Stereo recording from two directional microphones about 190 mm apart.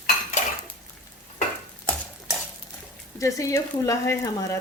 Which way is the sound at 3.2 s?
15° left (ahead or behind).